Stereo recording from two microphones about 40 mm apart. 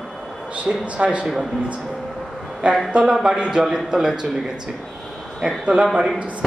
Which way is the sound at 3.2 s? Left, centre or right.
Centre.